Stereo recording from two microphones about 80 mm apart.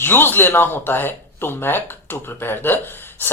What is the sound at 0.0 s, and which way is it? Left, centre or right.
Speech, left.